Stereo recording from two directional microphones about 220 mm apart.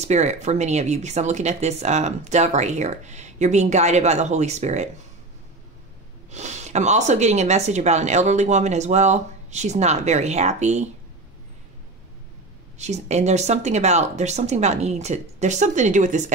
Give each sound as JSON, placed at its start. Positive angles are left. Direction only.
{"t": 0.0, "sound": "speech", "side_deg": -30}
{"t": 6.3, "sound": "speech", "side_deg": -30}
{"t": 12.7, "sound": "speech", "side_deg": -30}